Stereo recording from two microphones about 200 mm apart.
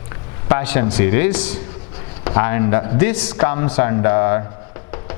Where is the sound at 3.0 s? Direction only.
10° left (ahead or behind).